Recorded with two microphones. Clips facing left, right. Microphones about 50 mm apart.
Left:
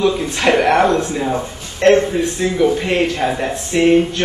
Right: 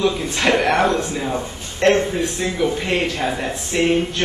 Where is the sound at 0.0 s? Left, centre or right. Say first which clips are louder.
Left 3 dB; centre.